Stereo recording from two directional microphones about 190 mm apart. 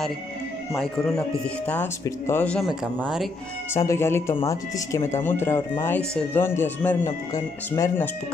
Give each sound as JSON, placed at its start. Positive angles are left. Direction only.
{"t": 1.7, "sound": "speech", "side_deg": 10}
{"t": 3.7, "sound": "speech", "side_deg": 15}